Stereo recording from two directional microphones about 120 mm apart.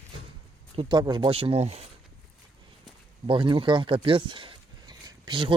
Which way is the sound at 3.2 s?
40° right (ahead or behind).